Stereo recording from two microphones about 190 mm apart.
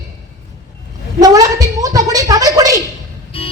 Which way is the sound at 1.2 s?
20° right (ahead or behind).